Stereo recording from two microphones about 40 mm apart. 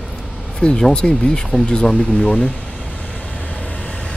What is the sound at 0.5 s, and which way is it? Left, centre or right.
Speech, centre.